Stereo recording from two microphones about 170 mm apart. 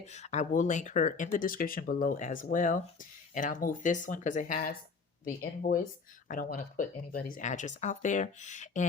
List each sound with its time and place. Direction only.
0.0 s speech: 40° left (ahead or behind)